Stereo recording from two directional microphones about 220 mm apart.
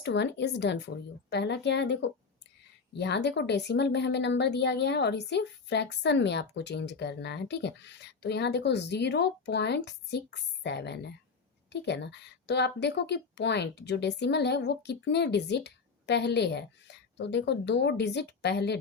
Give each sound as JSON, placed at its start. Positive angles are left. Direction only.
{"t": 0.0, "sound": "speech", "side_deg": 50}